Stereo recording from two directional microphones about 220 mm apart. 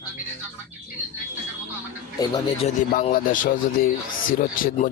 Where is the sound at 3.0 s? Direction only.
40° left (ahead or behind).